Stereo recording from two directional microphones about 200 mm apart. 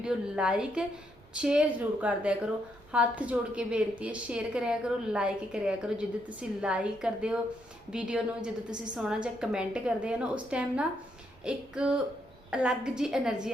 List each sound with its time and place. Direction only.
0.0 s a woman's voice: 5° right (ahead or behind)